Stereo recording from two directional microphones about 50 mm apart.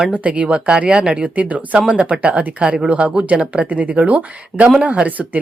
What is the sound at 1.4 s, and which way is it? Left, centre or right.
Speech, right.